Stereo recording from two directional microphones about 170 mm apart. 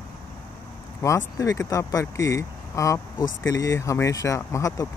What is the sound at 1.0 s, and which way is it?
Speech, 20° left (ahead or behind).